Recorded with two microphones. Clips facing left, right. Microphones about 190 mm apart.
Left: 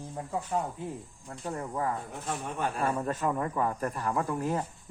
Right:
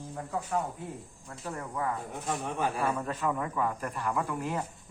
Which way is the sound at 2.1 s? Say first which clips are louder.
Right 2 dB; 15° right (ahead or behind).